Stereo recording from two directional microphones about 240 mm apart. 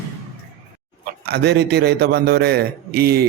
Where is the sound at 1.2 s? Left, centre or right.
Right.